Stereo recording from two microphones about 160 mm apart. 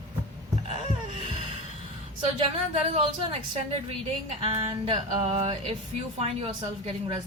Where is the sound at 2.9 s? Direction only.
35° right (ahead or behind).